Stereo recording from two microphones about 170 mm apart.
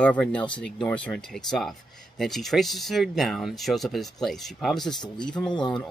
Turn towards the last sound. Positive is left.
turn(degrees=25)  # may be behind; listen again after turning